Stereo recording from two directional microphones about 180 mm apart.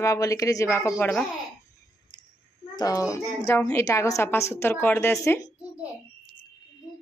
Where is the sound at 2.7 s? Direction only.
20° left (ahead or behind).